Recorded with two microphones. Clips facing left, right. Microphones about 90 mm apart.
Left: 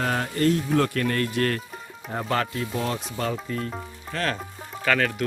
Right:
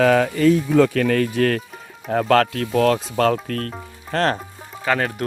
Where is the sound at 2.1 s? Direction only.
85° right.